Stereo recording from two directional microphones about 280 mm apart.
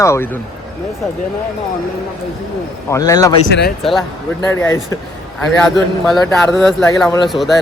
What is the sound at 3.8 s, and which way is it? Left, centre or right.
A man's voice, centre.